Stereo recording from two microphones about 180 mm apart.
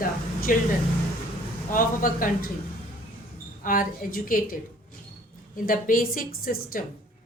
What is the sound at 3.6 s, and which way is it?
Speech, 50° left (ahead or behind).